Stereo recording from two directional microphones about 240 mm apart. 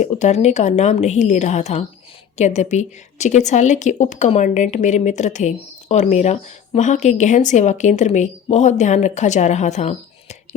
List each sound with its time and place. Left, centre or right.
0.0 s a woman's voice: left